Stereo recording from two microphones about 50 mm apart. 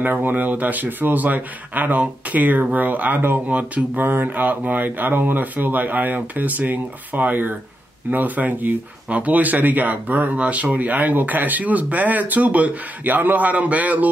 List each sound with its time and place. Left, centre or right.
0.0 s speech: right